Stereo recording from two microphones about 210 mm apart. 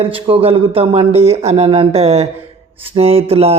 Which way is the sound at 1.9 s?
30° right (ahead or behind).